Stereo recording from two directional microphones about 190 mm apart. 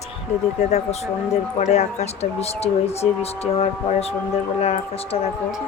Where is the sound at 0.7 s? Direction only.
35° left (ahead or behind).